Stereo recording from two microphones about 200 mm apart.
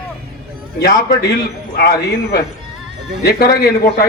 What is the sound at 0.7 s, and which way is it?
A man's voice, 55° left (ahead or behind).